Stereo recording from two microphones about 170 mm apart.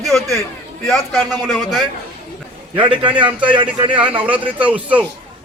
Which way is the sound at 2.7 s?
30° right (ahead or behind).